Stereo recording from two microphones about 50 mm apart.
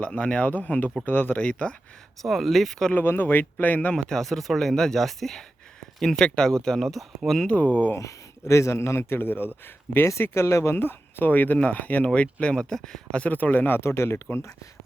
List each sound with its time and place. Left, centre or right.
0.0 s speech: left
1.4 s speech: left
2.2 s speech: centre
2.9 s speech: left
3.9 s speech: centre
7.4 s speech: left
7.9 s a man's voice: left
10.2 s speech: left
10.8 s speech: left; by 13.2 s centre
13.2 s speech: left
13.8 s speech: left